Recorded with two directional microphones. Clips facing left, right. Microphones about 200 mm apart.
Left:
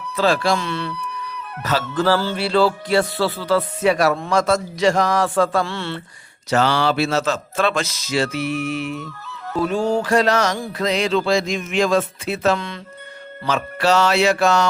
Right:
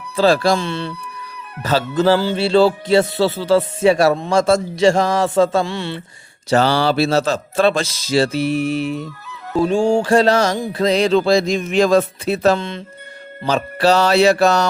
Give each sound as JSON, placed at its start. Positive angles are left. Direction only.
{"t": 0.2, "sound": "a man's voice", "side_deg": -35}
{"t": 1.6, "sound": "music", "side_deg": -25}
{"t": 6.5, "sound": "a man's voice", "side_deg": -35}
{"t": 9.5, "sound": "music", "side_deg": -25}
{"t": 10.7, "sound": "a man's voice", "side_deg": -30}